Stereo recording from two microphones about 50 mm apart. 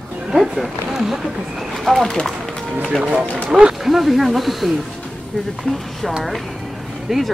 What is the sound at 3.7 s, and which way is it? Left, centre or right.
Speech, centre.